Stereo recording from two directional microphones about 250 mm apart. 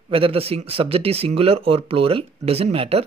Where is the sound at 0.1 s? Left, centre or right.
Right.